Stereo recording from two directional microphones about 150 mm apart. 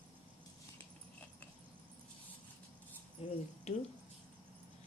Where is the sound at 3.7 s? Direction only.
45° left (ahead or behind).